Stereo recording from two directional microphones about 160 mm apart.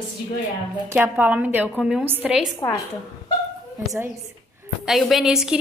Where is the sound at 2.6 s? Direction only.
25° left (ahead or behind).